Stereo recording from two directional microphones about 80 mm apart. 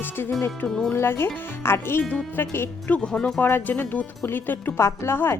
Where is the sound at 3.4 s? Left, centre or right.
Left.